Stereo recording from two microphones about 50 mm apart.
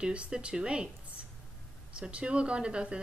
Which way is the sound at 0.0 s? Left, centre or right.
Right.